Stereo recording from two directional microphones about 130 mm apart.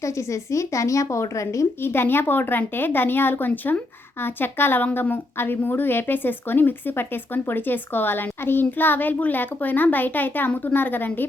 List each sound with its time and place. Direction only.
0.0 s a woman's voice: 25° left (ahead or behind)